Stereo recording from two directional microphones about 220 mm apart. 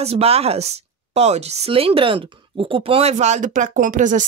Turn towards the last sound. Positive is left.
turn(degrees=-35)  # may be behind; listen again after turning